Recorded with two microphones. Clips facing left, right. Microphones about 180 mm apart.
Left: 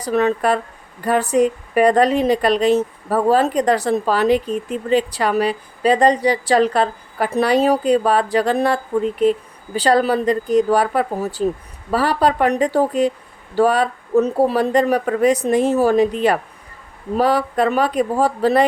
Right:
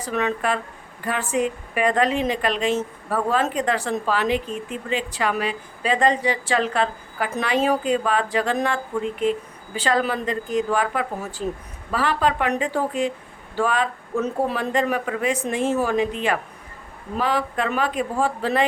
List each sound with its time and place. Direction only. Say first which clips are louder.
0.0 s a woman's voice: left 6 dB; 35° left (ahead or behind)